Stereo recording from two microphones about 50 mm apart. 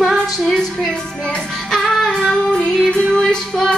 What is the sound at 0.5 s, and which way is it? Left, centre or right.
Music, centre.